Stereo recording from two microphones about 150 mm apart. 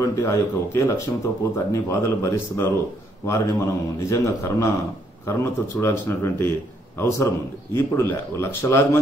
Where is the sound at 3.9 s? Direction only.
20° left (ahead or behind).